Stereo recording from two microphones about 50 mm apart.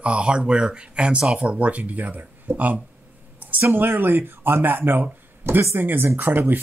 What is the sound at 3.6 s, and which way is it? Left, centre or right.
A man's voice, right.